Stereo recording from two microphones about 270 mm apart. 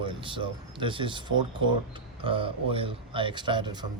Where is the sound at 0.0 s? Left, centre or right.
Centre.